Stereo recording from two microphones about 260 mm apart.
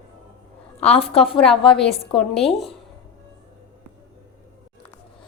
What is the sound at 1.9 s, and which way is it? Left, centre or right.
Speech, left.